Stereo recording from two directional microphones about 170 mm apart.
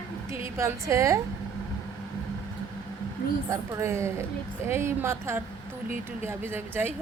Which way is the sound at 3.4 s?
15° right (ahead or behind).